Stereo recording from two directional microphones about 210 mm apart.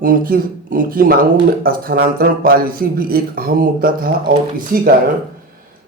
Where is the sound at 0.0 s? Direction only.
45° right (ahead or behind).